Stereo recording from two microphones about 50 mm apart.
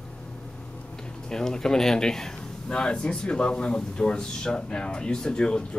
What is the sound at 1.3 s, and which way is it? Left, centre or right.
Speech, centre.